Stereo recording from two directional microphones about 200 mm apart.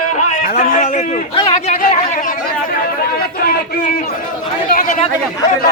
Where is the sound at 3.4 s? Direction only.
50° left (ahead or behind).